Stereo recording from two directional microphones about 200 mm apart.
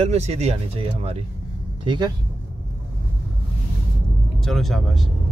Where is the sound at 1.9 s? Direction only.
20° right (ahead or behind).